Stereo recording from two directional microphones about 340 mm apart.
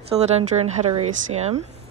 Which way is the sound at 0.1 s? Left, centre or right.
Centre.